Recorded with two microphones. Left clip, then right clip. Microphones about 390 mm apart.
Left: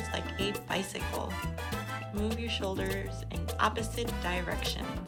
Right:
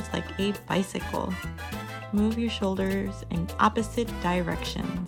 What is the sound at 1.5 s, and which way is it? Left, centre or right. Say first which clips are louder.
Music: even; left.